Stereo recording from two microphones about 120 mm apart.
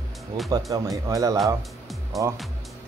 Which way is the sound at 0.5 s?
30° right (ahead or behind).